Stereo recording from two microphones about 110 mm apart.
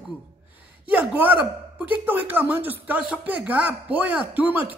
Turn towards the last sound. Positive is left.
turn(degrees=-15)  # may be behind; listen again after turning